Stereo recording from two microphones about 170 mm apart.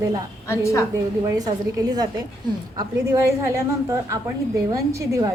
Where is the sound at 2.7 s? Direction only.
20° right (ahead or behind).